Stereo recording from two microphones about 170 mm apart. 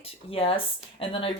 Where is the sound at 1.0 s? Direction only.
35° left (ahead or behind).